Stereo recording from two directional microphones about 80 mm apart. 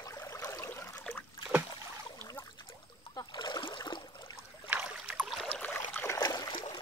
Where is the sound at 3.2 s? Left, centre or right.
Left.